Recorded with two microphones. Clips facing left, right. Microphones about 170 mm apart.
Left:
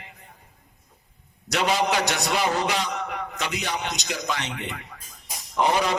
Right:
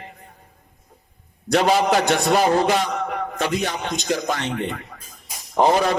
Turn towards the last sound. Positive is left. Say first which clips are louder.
# right 5 dB
turn(degrees=-45)  # may be behind; listen again after turning